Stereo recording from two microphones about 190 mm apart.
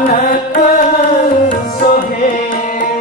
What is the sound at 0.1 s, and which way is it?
Carnatic music, 45° left (ahead or behind).